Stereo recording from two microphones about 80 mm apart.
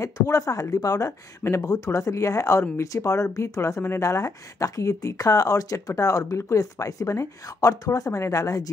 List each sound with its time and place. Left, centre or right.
0.0 s speech: left
1.4 s speech: left